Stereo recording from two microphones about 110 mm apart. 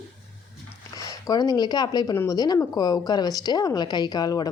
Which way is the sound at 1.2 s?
40° left (ahead or behind).